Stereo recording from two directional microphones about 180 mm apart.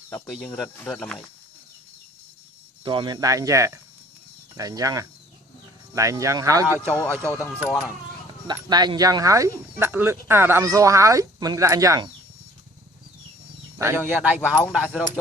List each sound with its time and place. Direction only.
0.4 s speech: 5° left (ahead or behind)
2.8 s speech: 25° right (ahead or behind)
7.2 s speech: 10° left (ahead or behind)
8.4 s speech: 25° right (ahead or behind)
13.7 s speech: 15° right (ahead or behind)